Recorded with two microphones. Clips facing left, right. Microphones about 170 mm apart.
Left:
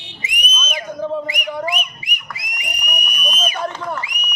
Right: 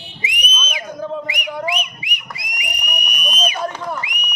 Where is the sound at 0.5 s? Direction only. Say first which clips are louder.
Left 4 dB; 5° left (ahead or behind).